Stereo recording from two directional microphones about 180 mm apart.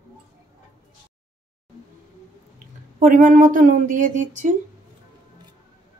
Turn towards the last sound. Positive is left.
turn(degrees=-45)  # may be behind; listen again after turning